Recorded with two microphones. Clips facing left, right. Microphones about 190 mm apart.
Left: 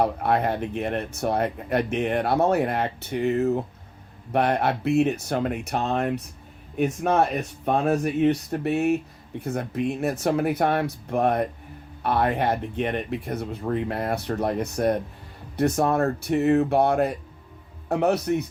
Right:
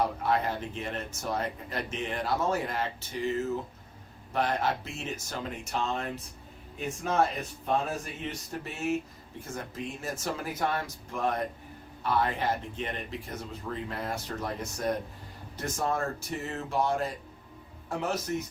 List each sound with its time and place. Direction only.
0.0 s speech: 60° left (ahead or behind)